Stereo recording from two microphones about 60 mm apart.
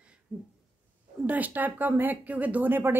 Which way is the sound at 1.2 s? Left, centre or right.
Right.